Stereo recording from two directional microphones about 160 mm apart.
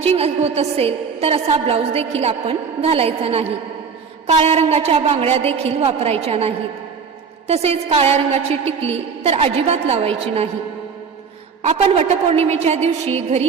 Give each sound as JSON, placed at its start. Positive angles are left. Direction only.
{"t": 0.0, "sound": "a woman's voice", "side_deg": -40}
{"t": 11.6, "sound": "a woman's voice", "side_deg": -40}